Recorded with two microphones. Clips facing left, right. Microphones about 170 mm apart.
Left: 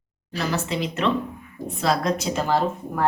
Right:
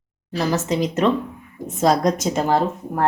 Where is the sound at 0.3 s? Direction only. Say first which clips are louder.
Right 5 dB; 40° right (ahead or behind).